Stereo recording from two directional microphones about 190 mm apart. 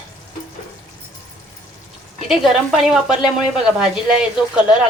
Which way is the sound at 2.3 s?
Centre (ahead or behind).